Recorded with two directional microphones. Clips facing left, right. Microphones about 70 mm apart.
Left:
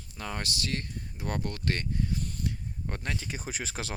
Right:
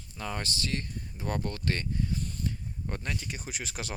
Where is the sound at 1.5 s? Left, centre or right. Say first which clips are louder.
Even; left.